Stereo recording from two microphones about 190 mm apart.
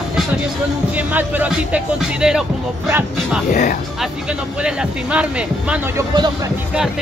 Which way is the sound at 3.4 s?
45° left (ahead or behind).